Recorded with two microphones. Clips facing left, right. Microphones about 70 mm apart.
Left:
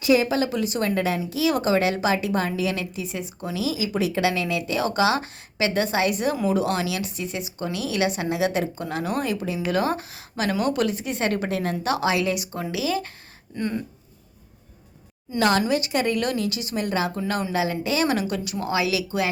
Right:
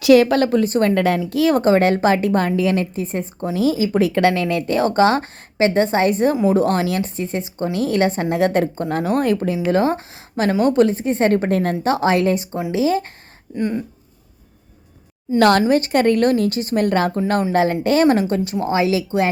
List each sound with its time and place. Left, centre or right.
0.0 s speech: right
9.6 s speech: right
13.6 s speech: centre
15.4 s speech: right